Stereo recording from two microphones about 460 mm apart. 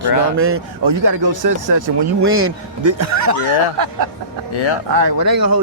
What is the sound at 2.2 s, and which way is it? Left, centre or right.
A man's voice, right.